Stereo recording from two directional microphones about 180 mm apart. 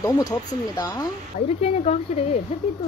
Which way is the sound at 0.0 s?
20° left (ahead or behind).